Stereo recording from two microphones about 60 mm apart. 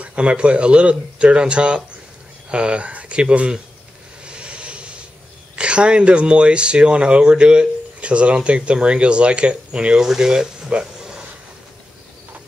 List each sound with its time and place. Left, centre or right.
0.0 s speech: centre
4.2 s vehicle: centre
5.6 s speech: centre